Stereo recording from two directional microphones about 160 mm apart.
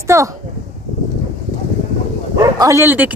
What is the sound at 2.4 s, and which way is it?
Speech, 20° right (ahead or behind).